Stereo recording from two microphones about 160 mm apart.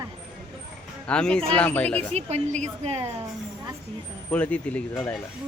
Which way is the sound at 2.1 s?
45° right (ahead or behind).